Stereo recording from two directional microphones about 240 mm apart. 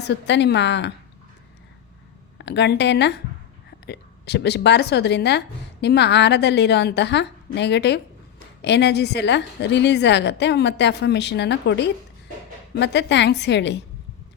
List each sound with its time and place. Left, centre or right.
0.0 s a woman's voice: left
2.4 s a woman's voice: left